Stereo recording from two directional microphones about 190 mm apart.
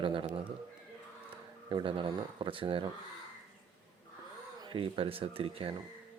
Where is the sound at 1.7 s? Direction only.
25° right (ahead or behind).